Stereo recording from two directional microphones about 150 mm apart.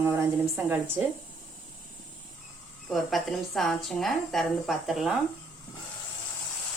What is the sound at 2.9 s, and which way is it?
A woman's voice, centre (ahead or behind).